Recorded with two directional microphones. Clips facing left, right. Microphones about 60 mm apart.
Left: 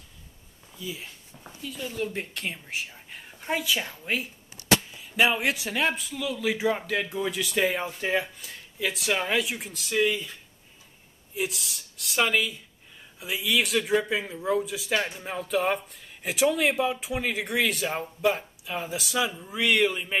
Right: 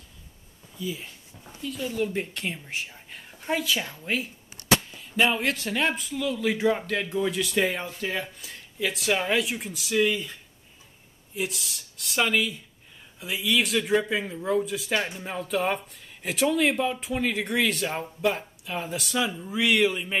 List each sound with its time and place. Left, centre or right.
0.7 s a man's voice: centre
7.8 s speech: centre
8.4 s a man's voice: centre
11.3 s a man's voice: centre